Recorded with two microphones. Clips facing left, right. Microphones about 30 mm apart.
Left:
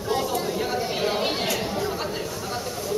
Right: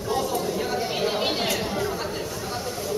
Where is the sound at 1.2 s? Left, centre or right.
Centre.